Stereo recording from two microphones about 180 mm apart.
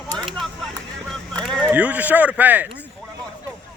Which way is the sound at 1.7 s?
10° right (ahead or behind).